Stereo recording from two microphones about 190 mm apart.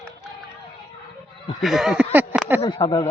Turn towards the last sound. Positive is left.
turn(degrees=25)  # may be behind; listen again after turning